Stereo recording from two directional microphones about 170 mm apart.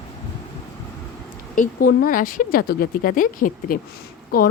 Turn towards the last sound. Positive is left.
turn(degrees=60)  # may be behind; listen again after turning